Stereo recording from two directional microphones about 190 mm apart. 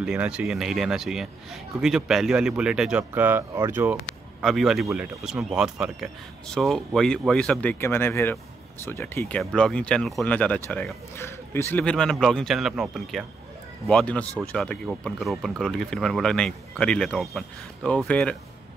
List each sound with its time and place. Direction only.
0.0 s a man's voice: 5° right (ahead or behind)
4.4 s a man's voice: centre (ahead or behind)